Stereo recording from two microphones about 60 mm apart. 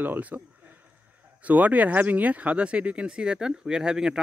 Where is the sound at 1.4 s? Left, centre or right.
Right.